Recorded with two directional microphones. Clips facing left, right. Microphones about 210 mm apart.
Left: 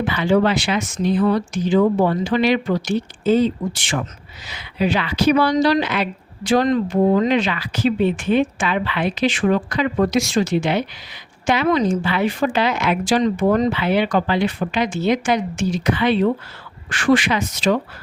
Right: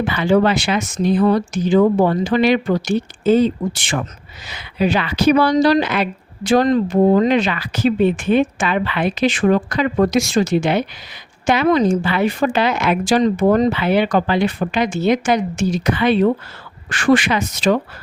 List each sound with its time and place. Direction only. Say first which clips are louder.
0.0 s speech: right 2 dB; 45° right (ahead or behind)